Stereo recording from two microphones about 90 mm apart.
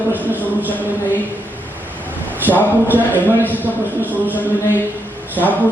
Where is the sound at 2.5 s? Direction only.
20° right (ahead or behind).